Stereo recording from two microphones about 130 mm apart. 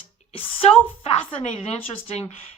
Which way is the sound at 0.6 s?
50° left (ahead or behind).